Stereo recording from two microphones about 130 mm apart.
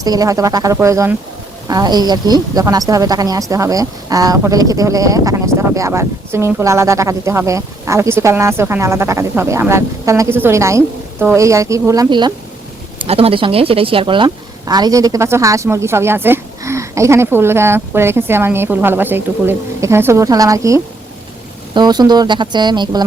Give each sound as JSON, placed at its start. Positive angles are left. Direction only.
{"t": 0.0, "sound": "speech", "side_deg": -30}
{"t": 13.1, "sound": "speech", "side_deg": -50}
{"t": 14.3, "sound": "speech", "side_deg": -30}